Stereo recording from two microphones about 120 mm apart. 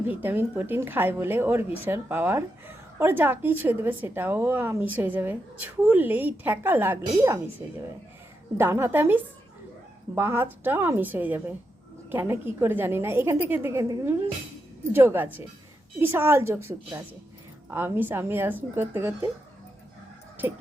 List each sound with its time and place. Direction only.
0.1 s a woman's voice: 15° right (ahead or behind)
8.5 s a woman's voice: 20° right (ahead or behind)
14.9 s a woman's voice: 20° right (ahead or behind)
20.4 s music: 15° right (ahead or behind)